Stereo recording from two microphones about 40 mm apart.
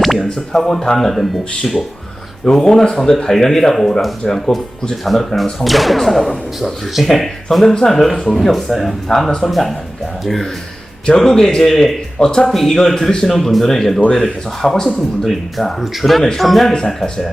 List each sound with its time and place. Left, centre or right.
0.0 s speech: centre
7.7 s speech: centre
8.2 s speech: centre
12.2 s speech: left
12.5 s speech: centre